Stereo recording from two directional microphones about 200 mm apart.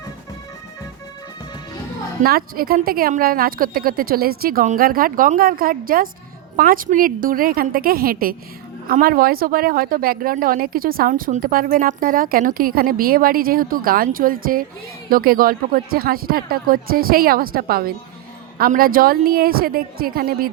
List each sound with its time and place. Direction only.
2.2 s speech: 50° right (ahead or behind)